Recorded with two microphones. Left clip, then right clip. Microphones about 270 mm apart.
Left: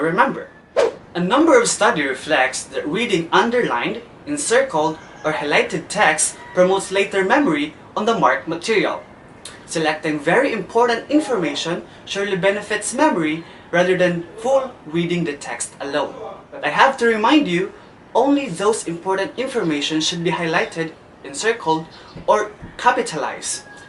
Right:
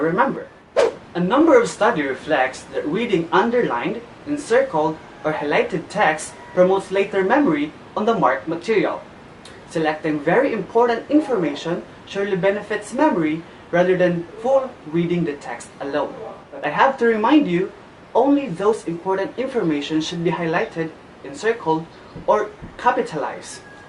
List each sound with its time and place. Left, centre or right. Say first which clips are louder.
0.0 s speech: left 2 dB; centre
0.7 s speech: even; centre
4.7 s speech: left 1 dB; right
5.2 s speech: left 2 dB; centre